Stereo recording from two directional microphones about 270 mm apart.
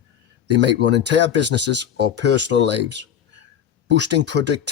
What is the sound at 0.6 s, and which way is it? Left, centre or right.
Speech, right.